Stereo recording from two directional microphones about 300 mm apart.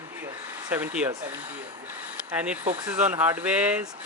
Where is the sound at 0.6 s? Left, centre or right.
Centre.